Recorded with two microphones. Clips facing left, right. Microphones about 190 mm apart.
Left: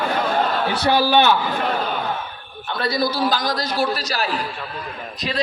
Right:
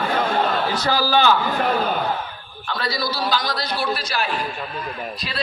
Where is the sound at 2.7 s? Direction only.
55° left (ahead or behind).